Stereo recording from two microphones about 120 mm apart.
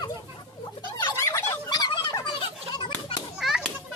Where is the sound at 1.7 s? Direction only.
35° left (ahead or behind).